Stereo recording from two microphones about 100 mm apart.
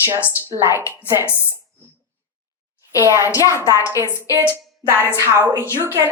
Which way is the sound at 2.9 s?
30° right (ahead or behind).